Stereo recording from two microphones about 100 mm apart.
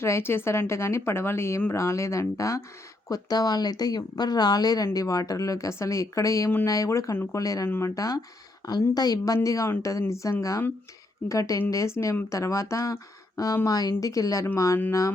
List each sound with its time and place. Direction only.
0.0 s a woman's voice: 25° left (ahead or behind)